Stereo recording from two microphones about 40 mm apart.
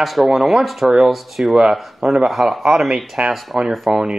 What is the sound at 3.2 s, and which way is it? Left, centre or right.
Speech, right.